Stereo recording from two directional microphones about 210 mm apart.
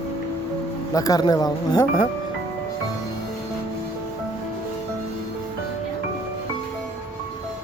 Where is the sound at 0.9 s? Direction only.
15° left (ahead or behind).